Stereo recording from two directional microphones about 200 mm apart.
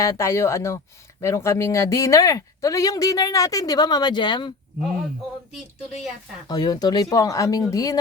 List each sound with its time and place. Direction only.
0.0 s speech: 15° left (ahead or behind)
6.5 s speech: 20° left (ahead or behind)